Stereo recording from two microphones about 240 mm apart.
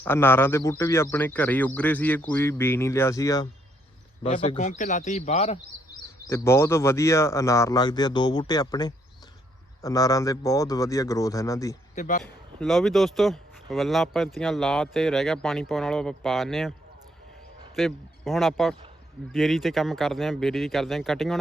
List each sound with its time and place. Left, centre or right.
0.0 s speech: centre
4.2 s a man's voice: left
6.2 s speech: centre
11.9 s a man's voice: left
12.2 s speech: centre
17.7 s speech: centre